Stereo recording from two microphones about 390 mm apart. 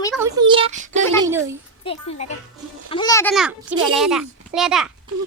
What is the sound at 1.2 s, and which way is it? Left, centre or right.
Speech, centre.